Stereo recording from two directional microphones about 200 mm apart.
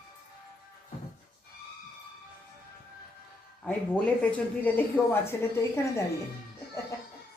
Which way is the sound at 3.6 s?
5° left (ahead or behind).